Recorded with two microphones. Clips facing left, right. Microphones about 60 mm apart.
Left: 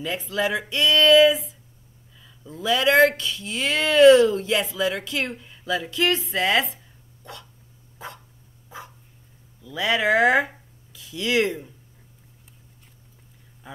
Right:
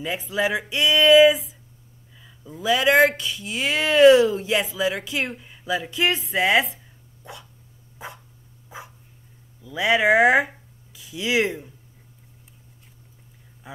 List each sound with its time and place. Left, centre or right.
0.0 s speech: centre
7.2 s dog: centre
9.6 s speech: centre
13.6 s a sound: centre